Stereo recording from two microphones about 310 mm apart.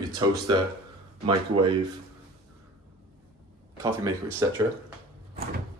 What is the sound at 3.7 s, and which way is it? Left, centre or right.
Speech, centre.